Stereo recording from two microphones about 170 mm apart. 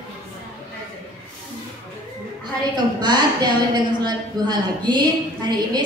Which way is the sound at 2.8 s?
25° right (ahead or behind).